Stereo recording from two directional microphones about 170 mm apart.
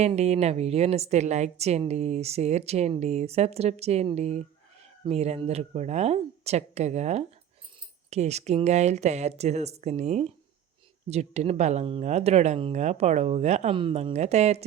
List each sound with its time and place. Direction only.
0.0 s a woman's voice: 40° right (ahead or behind)